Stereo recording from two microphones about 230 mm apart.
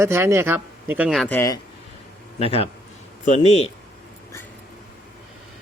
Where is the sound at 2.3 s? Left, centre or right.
Left.